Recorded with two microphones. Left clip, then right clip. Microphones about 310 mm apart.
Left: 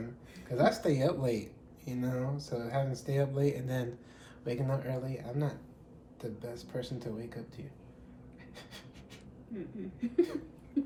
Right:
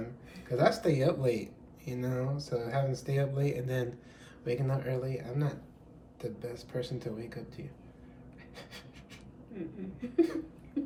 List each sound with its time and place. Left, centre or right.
0.5 s speech: centre
10.0 s speech: centre